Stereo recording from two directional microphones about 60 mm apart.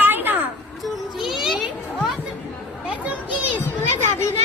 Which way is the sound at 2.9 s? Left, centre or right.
Right.